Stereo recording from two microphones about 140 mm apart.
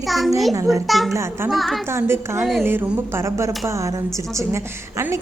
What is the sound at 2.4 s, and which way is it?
Speech, centre (ahead or behind).